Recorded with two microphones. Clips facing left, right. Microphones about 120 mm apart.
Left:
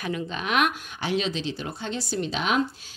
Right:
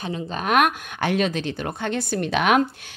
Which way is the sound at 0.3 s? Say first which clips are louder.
Right 6 dB; 45° right (ahead or behind).